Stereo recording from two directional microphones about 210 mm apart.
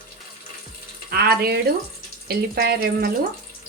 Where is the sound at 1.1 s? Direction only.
45° right (ahead or behind).